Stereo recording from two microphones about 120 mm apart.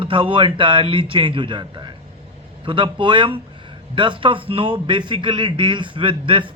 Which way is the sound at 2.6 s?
45° right (ahead or behind).